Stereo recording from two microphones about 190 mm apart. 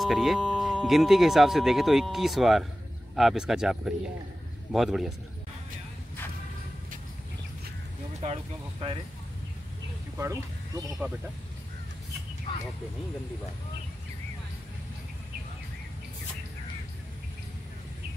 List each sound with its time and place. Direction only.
0.0 s speech: centre (ahead or behind)
10.1 s speech: 15° right (ahead or behind)
12.5 s a sound: 25° left (ahead or behind)